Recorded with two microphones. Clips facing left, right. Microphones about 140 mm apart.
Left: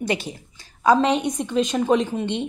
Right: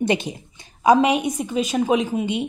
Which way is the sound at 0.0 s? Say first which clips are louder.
Right 4 dB; 20° right (ahead or behind).